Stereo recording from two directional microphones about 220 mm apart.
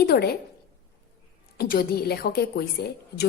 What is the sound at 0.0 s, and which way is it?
Speech, 45° left (ahead or behind).